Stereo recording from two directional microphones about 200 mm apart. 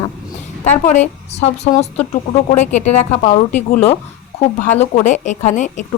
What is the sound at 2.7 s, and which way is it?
A woman's voice, 35° left (ahead or behind).